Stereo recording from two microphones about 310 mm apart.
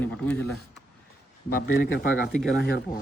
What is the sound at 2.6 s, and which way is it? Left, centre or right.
Speech, left.